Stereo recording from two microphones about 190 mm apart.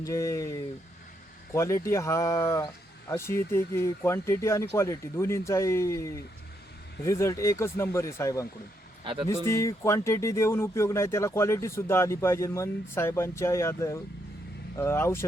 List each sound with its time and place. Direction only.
0.0 s speech: 15° left (ahead or behind)
9.0 s speech: 25° right (ahead or behind)
9.5 s speech: 15° left (ahead or behind)